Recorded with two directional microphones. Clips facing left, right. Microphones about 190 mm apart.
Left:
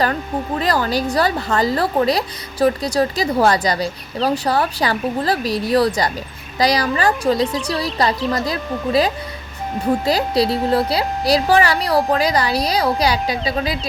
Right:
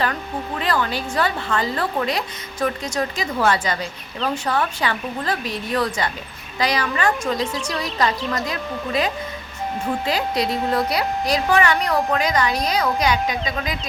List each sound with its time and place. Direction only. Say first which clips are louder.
0.6 s a woman's voice: left 4 dB; 40° left (ahead or behind)